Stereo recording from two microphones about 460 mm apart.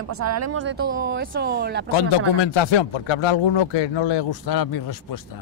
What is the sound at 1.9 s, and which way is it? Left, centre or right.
Speech, left.